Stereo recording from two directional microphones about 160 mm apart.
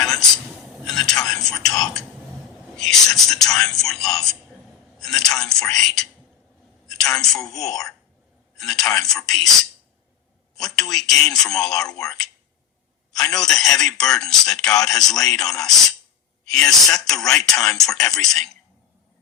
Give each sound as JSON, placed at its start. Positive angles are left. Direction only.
{"t": 0.0, "sound": "a sound", "side_deg": 5}
{"t": 1.2, "sound": "speech", "side_deg": 5}
{"t": 6.8, "sound": "a sound", "side_deg": 5}
{"t": 7.3, "sound": "speech", "side_deg": 20}
{"t": 7.6, "sound": "speech", "side_deg": 5}
{"t": 10.8, "sound": "speech", "side_deg": 5}